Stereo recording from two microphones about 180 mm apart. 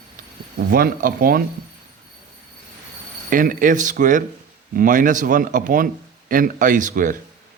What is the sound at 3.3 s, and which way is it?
Speech, 50° right (ahead or behind).